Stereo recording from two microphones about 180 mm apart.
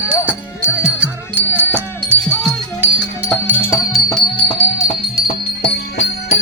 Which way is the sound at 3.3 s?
10° left (ahead or behind).